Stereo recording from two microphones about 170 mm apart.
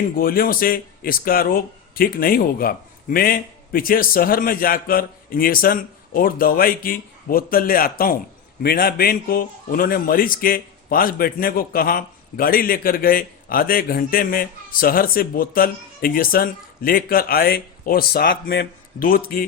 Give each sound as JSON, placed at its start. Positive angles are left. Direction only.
{"t": 0.2, "sound": "speech", "side_deg": 55}